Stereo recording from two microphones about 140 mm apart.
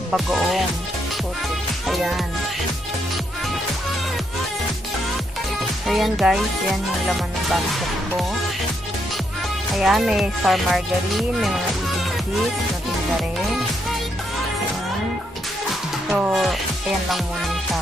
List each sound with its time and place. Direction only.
0.1 s speech: centre (ahead or behind)
1.9 s speech: centre (ahead or behind)
5.9 s speech: centre (ahead or behind)
9.8 s speech: 5° right (ahead or behind)
16.1 s speech: 5° right (ahead or behind)